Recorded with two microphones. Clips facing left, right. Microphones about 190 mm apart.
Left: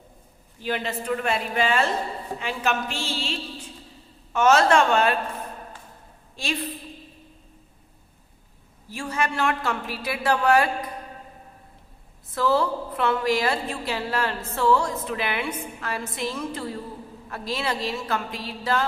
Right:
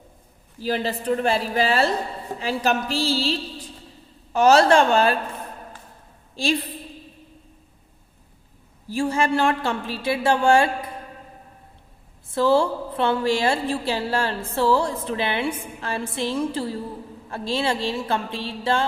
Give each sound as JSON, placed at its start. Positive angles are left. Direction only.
{"t": 0.6, "sound": "a woman's voice", "side_deg": -35}
{"t": 6.3, "sound": "a woman's voice", "side_deg": -30}
{"t": 8.9, "sound": "a woman's voice", "side_deg": -30}
{"t": 12.3, "sound": "a woman's voice", "side_deg": -30}